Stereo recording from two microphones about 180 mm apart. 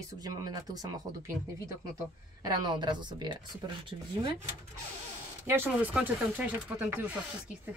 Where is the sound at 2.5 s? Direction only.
25° right (ahead or behind).